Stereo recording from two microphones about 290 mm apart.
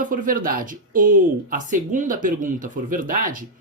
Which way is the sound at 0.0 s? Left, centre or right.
Right.